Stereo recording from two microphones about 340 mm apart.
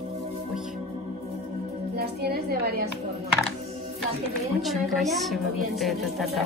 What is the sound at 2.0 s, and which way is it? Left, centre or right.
Music, right.